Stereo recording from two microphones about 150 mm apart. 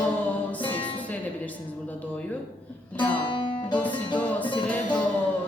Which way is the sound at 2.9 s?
10° left (ahead or behind).